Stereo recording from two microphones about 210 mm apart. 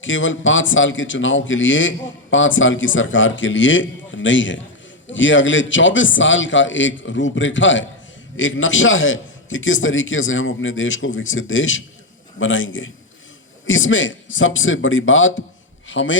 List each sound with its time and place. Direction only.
0.0 s a man's voice: 65° left (ahead or behind)